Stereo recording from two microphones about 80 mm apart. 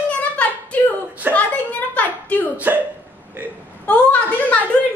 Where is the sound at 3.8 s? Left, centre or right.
Centre.